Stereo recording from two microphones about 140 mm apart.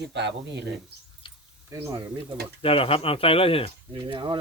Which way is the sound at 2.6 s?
40° left (ahead or behind).